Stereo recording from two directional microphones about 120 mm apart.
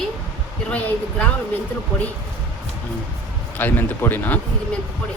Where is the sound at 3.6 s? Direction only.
15° left (ahead or behind).